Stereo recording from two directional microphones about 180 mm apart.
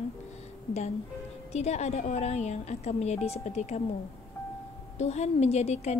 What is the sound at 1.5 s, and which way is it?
A woman's voice, 40° left (ahead or behind).